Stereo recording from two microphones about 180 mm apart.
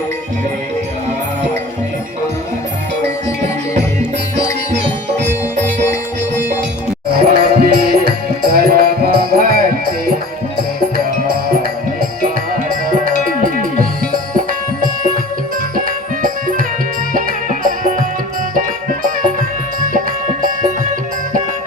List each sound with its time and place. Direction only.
7.2 s music: 55° right (ahead or behind)
10.9 s music: 55° right (ahead or behind)
16.2 s music: 50° right (ahead or behind)